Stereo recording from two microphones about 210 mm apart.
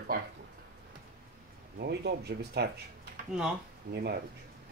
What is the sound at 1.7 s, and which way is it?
Speech, 50° right (ahead or behind).